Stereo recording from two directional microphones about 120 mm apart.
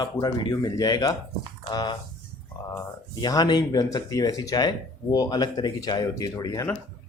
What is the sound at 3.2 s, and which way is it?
Speech, 35° left (ahead or behind).